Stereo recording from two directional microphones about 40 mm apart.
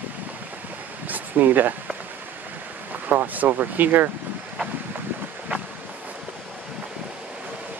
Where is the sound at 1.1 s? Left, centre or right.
Right.